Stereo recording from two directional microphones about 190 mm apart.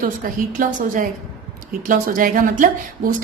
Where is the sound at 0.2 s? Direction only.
45° right (ahead or behind).